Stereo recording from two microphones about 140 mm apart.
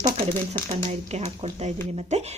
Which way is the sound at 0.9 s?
50° right (ahead or behind).